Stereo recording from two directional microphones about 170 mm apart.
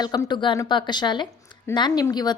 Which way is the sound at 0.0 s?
25° left (ahead or behind).